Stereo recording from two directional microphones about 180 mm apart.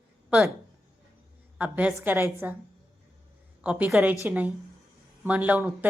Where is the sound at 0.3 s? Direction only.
5° right (ahead or behind).